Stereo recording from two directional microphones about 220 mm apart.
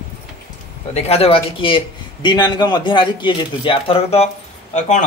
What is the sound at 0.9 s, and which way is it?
A man's voice, 30° left (ahead or behind).